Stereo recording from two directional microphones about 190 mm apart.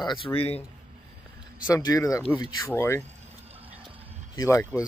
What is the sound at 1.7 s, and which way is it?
Speech, 15° left (ahead or behind).